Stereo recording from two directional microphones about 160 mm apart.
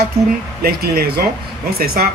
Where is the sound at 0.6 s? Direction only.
70° right (ahead or behind).